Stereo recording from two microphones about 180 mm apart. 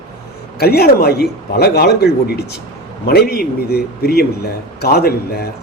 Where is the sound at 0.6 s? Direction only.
60° left (ahead or behind).